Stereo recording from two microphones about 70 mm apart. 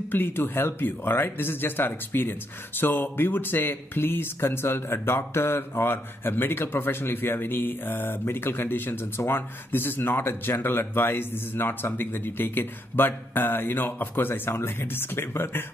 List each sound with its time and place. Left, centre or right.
0.1 s speech: left